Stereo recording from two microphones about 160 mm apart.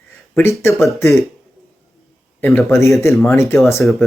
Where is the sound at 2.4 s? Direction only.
15° left (ahead or behind).